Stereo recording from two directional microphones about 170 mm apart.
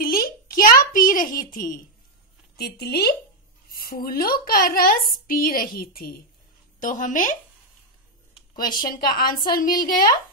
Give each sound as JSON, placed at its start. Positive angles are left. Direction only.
{"t": 0.0, "sound": "a sound", "side_deg": 55}
{"t": 2.5, "sound": "a woman's voice", "side_deg": 65}
{"t": 6.8, "sound": "speech", "side_deg": 50}
{"t": 8.5, "sound": "a woman's voice", "side_deg": 60}